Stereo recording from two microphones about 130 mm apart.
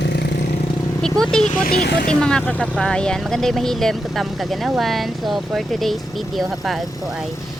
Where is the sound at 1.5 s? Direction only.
90° left.